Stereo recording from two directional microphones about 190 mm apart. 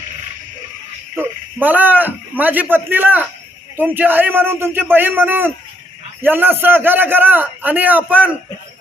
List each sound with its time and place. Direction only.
1.1 s a man's voice: 10° right (ahead or behind)